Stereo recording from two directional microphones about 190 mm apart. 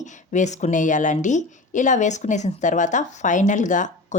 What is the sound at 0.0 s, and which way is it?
A woman's voice, 40° left (ahead or behind).